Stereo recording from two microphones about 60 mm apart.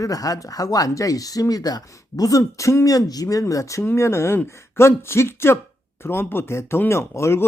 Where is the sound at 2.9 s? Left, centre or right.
Left.